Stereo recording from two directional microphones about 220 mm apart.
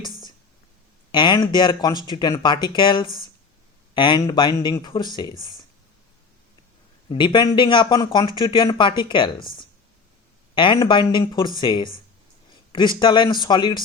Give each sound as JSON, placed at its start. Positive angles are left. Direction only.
{"t": 1.1, "sound": "speech", "side_deg": 20}
{"t": 7.1, "sound": "speech", "side_deg": 20}
{"t": 10.5, "sound": "speech", "side_deg": 20}
{"t": 13.0, "sound": "speech", "side_deg": 20}